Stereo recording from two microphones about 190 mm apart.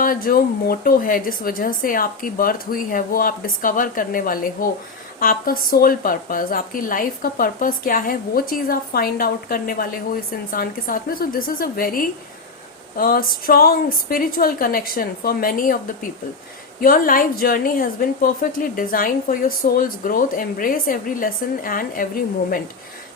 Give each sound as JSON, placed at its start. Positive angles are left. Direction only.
{"t": 0.0, "sound": "a woman's voice", "side_deg": 50}
{"t": 16.8, "sound": "a woman's voice", "side_deg": 45}